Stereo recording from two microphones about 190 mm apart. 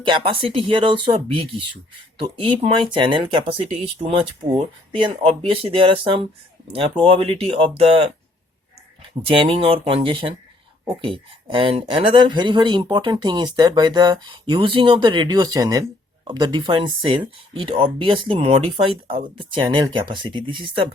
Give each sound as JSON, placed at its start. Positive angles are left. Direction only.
{"t": 0.0, "sound": "speech", "side_deg": -25}
{"t": 9.2, "sound": "speech", "side_deg": -30}